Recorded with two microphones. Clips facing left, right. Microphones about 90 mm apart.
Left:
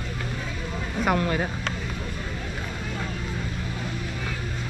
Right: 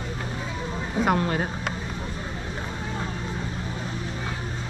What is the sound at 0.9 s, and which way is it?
Speech, 20° right (ahead or behind).